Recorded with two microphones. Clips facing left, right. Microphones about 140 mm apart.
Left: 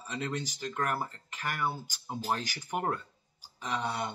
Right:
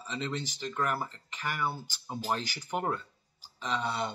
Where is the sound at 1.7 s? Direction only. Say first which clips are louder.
Even; 15° left (ahead or behind).